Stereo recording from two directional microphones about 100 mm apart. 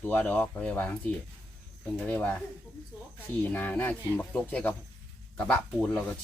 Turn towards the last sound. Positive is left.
turn(degrees=10)  # may be behind; listen again after turning